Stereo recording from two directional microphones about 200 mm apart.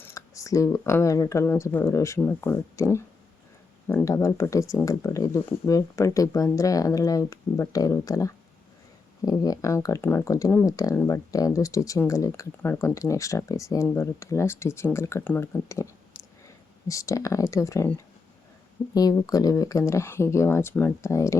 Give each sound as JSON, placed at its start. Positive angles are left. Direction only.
{"t": 0.0, "sound": "speech", "side_deg": 15}
{"t": 16.9, "sound": "speech", "side_deg": 15}